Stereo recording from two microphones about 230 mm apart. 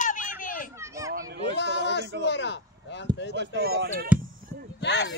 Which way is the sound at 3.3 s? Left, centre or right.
Right.